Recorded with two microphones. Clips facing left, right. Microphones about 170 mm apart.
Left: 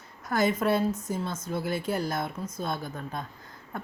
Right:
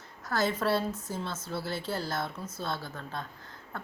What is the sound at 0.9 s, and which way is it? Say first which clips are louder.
Speech: left 6 dB; 10° right (ahead or behind).